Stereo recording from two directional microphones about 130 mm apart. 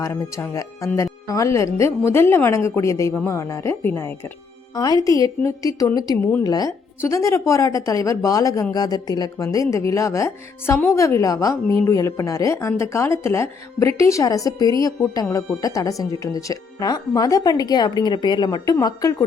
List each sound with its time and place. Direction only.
0.0 s a woman's voice: 20° left (ahead or behind)
4.7 s a woman's voice: 30° left (ahead or behind)